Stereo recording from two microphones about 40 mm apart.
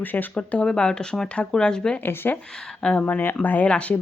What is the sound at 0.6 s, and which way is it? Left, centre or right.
Speech, left.